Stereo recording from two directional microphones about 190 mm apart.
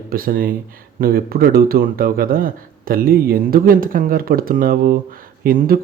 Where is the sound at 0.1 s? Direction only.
50° right (ahead or behind).